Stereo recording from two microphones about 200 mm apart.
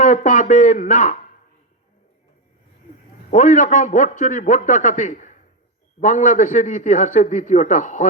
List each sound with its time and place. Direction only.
0.0 s a man's voice: 40° left (ahead or behind)
3.2 s a man's voice: 40° left (ahead or behind)